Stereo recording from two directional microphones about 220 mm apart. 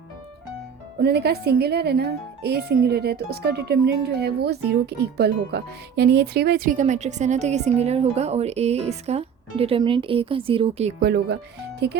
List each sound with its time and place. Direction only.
1.0 s speech: 45° right (ahead or behind); by 10.9 s 25° right (ahead or behind)
11.0 s speech: 50° right (ahead or behind)